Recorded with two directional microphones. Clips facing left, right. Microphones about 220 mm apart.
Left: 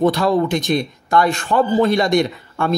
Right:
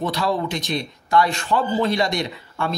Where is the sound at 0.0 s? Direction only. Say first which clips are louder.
Left 7 dB; 50° left (ahead or behind).